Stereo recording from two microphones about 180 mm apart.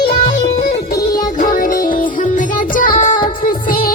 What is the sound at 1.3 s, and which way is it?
Music, 45° left (ahead or behind).